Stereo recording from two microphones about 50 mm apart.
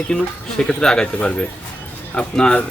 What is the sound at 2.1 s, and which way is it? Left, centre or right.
Speech, centre.